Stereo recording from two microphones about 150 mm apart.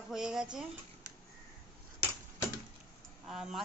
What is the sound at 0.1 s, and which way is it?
Speech, 5° right (ahead or behind).